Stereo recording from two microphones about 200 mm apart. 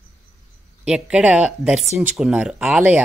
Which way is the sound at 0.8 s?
5° right (ahead or behind).